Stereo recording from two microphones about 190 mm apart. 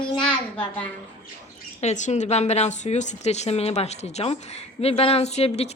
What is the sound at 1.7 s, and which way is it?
A woman's voice, 40° left (ahead or behind).